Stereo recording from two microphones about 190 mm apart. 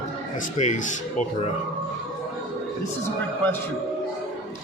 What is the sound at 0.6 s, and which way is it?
Speech, 40° left (ahead or behind).